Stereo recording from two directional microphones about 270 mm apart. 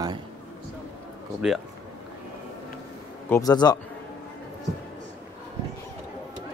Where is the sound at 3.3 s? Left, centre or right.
Centre.